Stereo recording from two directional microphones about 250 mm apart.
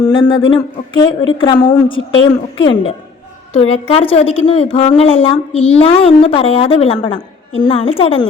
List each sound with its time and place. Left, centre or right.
0.0 s a woman's voice: centre